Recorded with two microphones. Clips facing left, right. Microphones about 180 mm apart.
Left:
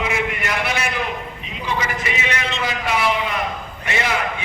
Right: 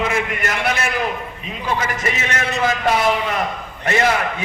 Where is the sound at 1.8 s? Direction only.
45° right (ahead or behind).